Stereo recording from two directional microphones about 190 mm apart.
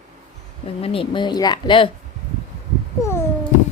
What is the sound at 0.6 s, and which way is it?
A woman's voice, 30° left (ahead or behind).